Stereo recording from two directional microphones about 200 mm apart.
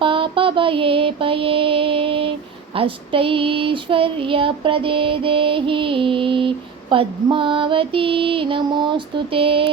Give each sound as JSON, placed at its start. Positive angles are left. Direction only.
{"t": 0.0, "sound": "mantra", "side_deg": -25}
{"t": 2.7, "sound": "child singing", "side_deg": -25}